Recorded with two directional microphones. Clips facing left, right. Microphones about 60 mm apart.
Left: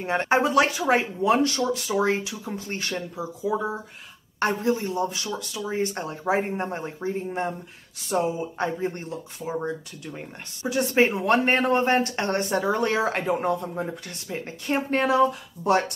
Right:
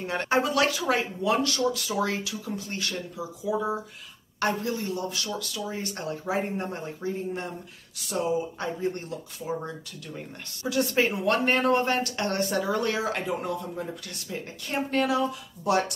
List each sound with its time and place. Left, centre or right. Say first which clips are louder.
0.0 s speech: left 4 dB; left